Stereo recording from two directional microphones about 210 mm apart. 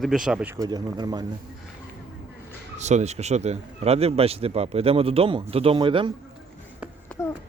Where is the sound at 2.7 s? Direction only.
35° right (ahead or behind).